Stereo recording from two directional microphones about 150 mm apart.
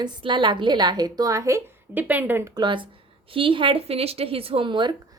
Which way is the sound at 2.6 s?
30° right (ahead or behind).